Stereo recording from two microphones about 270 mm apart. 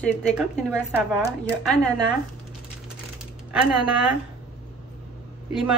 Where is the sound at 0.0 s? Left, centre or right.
Centre.